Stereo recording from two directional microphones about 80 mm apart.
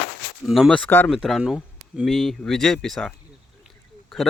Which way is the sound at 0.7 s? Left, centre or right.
Centre.